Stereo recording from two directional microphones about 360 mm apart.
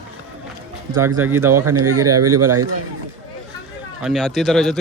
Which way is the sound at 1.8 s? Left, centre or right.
Right.